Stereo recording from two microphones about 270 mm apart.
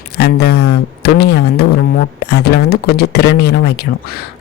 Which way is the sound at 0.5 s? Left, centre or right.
Left.